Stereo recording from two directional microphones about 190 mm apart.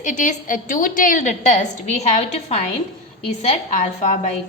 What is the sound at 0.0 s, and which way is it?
A woman's voice, 40° left (ahead or behind).